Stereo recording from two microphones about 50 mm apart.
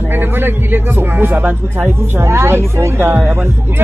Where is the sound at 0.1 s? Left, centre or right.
Right.